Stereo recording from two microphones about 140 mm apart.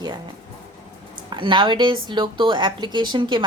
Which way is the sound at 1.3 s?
35° right (ahead or behind).